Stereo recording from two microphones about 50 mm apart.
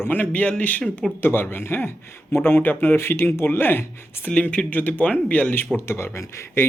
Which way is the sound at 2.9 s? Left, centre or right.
Left.